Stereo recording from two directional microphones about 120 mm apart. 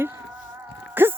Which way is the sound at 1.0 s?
15° right (ahead or behind).